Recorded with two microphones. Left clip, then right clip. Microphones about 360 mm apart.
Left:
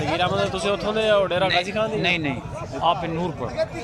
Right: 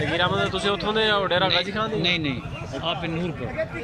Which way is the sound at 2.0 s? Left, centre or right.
Left.